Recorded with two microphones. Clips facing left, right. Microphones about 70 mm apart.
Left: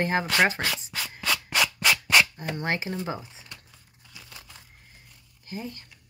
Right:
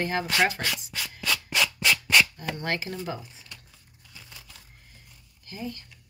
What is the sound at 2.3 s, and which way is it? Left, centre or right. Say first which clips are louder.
Speech: left 1 dB; left.